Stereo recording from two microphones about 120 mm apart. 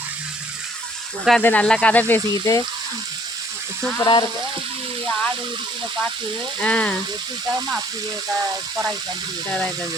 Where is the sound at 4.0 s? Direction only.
40° left (ahead or behind).